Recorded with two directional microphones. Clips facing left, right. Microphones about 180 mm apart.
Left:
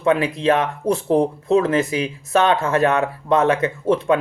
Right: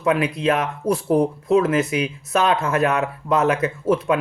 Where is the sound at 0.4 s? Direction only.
30° left (ahead or behind).